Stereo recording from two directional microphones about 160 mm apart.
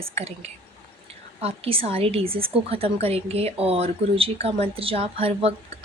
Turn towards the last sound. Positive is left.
turn(degrees=-40)  # may be behind; listen again after turning